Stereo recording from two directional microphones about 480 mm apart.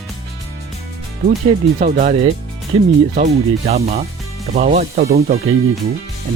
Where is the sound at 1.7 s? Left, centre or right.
Centre.